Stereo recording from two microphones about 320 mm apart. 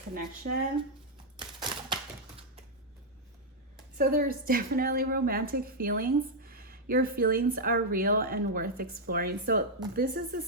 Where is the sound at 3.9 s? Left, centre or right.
Right.